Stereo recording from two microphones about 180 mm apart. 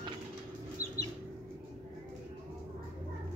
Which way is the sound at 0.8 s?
50° left (ahead or behind).